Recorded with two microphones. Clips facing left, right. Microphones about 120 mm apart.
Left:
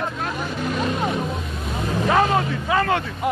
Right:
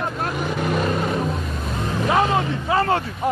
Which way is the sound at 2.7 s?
30° right (ahead or behind).